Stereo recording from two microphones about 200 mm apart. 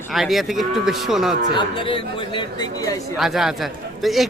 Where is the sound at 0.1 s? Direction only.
Centre (ahead or behind).